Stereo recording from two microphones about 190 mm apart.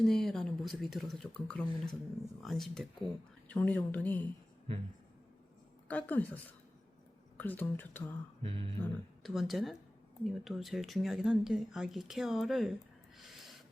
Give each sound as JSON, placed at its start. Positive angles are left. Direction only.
{"t": 0.0, "sound": "a woman's voice", "side_deg": 0}
{"t": 4.7, "sound": "speech", "side_deg": -30}
{"t": 5.9, "sound": "a woman's voice", "side_deg": 10}
{"t": 8.4, "sound": "a sound", "side_deg": -30}
{"t": 8.8, "sound": "speech", "side_deg": 0}
{"t": 13.1, "sound": "snort", "side_deg": 0}